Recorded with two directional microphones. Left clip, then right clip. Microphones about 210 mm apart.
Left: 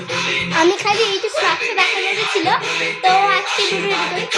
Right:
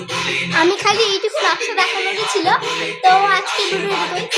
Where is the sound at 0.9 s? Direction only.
20° right (ahead or behind).